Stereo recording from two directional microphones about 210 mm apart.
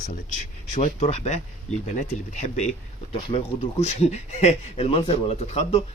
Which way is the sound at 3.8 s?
30° left (ahead or behind).